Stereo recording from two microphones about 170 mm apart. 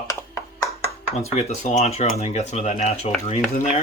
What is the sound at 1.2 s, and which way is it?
Speech, 40° left (ahead or behind).